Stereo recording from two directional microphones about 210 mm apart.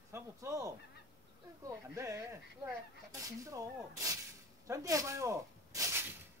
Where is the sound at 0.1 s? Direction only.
15° right (ahead or behind).